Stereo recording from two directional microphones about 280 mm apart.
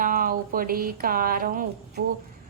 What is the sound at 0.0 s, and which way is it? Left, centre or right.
A woman's voice, right.